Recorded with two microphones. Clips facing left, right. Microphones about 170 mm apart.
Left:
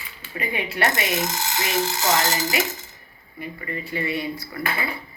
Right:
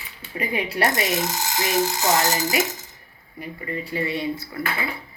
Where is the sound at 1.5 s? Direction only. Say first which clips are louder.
Right 3 dB; 15° right (ahead or behind).